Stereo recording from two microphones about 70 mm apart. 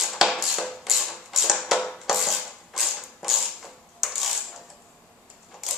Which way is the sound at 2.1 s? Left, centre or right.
Centre.